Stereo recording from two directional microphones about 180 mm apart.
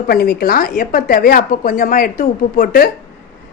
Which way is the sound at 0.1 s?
55° left (ahead or behind).